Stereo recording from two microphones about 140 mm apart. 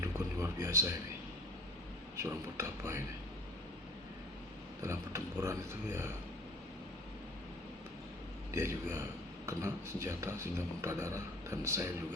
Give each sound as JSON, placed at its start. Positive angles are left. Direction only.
{"t": 0.0, "sound": "a sound", "side_deg": -20}
{"t": 2.1, "sound": "speech", "side_deg": -20}
{"t": 4.8, "sound": "speech", "side_deg": -20}
{"t": 8.5, "sound": "speech", "side_deg": -20}